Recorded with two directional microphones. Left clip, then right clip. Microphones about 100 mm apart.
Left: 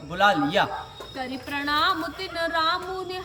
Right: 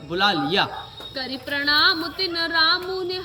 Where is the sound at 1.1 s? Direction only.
25° left (ahead or behind).